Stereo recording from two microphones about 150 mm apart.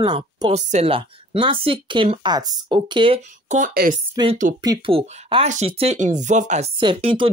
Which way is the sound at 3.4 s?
55° right (ahead or behind).